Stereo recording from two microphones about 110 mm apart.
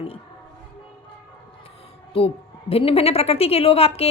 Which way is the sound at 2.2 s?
60° left (ahead or behind).